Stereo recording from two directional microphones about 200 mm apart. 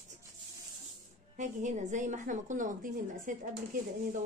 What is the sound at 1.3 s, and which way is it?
A woman's voice, 40° right (ahead or behind).